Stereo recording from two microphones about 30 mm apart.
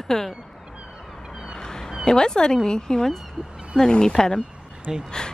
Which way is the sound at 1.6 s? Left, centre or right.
Left.